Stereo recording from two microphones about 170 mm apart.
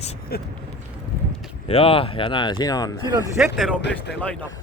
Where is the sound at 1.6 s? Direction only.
35° left (ahead or behind).